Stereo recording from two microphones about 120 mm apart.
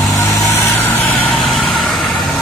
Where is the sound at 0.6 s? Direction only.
15° left (ahead or behind).